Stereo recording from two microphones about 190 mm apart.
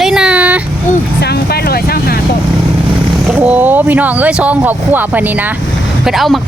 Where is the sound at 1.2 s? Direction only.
60° left (ahead or behind).